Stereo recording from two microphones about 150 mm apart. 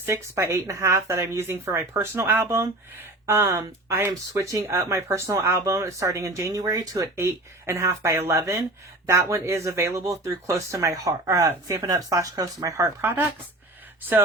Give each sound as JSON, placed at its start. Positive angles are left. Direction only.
{"t": 0.0, "sound": "speech", "side_deg": -15}